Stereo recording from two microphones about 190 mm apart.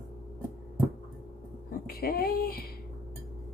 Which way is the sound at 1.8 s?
50° left (ahead or behind).